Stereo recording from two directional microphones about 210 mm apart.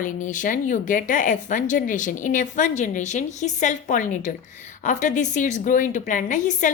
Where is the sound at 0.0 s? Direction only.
40° left (ahead or behind).